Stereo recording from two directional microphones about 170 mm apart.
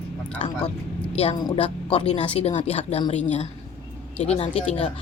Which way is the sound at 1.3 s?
25° left (ahead or behind).